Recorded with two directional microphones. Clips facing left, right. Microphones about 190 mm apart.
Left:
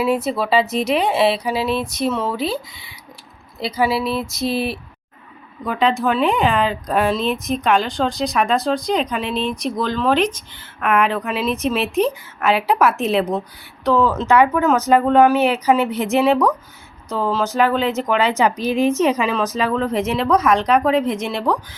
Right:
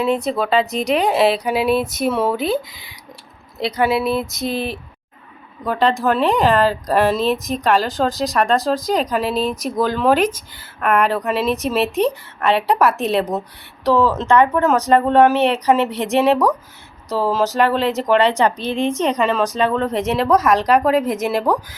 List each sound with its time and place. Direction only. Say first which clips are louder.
0.0 s speech: even; 5° left (ahead or behind)
3.6 s speech: right 2 dB; centre (ahead or behind)
9.3 s speech: right 2 dB; 40° right (ahead or behind)
9.7 s speech: right 3 dB; 10° right (ahead or behind)